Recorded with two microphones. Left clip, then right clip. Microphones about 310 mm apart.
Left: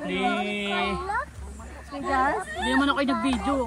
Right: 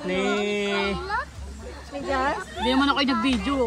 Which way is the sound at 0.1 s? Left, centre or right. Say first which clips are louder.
Right 2 dB; right.